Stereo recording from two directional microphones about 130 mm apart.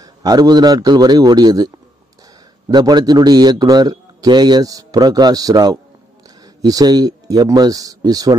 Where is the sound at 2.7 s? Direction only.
35° right (ahead or behind).